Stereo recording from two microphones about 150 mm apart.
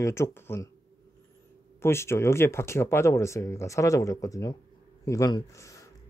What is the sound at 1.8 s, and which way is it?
Speech, 15° left (ahead or behind).